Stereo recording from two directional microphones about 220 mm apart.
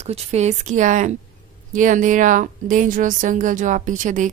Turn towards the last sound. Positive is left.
turn(degrees=-35)  # may be behind; listen again after turning